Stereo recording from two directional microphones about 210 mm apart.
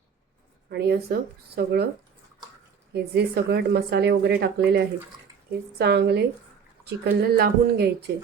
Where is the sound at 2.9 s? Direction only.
50° right (ahead or behind).